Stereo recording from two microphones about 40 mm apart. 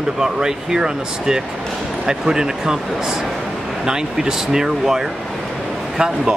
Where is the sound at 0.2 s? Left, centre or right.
Centre.